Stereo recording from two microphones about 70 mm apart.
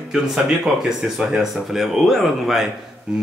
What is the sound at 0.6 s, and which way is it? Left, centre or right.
Speech, centre.